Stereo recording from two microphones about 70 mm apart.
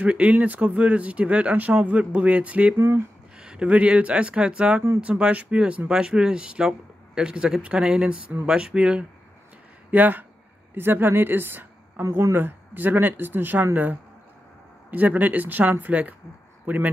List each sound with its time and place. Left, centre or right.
0.0 s speech: centre
2.8 s a woman's voice: right
3.3 s speech: centre
9.8 s a woman's voice: right
12.0 s speech: right
12.4 s speech: right
14.9 s speech: right